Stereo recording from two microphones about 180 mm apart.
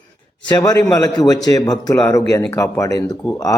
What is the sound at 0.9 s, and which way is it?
Speech, 20° left (ahead or behind).